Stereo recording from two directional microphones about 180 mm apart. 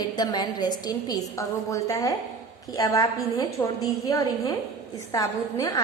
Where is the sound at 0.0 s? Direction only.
20° left (ahead or behind).